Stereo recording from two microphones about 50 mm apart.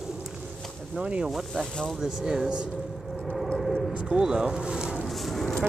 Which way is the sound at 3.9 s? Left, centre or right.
Centre.